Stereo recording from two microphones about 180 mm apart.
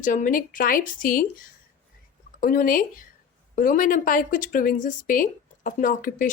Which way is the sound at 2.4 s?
50° left (ahead or behind).